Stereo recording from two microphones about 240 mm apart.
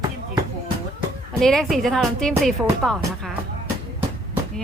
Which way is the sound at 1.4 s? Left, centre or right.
Centre.